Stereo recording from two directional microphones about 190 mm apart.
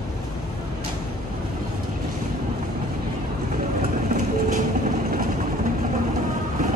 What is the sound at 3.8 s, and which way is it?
Train, 40° right (ahead or behind).